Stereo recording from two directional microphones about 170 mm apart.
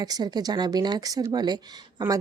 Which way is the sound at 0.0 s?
25° right (ahead or behind).